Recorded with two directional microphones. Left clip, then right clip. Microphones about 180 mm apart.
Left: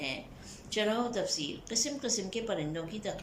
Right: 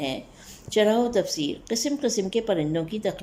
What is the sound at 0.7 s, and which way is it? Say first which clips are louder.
A woman's voice: right 10 dB; 45° right (ahead or behind).